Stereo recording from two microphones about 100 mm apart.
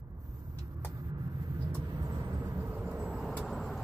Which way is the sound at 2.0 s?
35° right (ahead or behind).